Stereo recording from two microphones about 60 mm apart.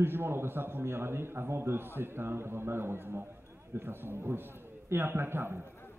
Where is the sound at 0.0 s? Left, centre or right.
Right.